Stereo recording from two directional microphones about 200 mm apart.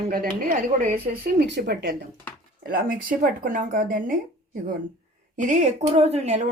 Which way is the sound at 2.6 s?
45° right (ahead or behind).